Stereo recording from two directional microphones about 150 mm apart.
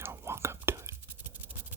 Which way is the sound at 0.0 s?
15° right (ahead or behind).